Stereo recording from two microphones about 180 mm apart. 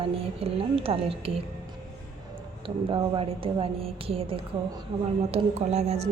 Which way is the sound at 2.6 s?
30° right (ahead or behind).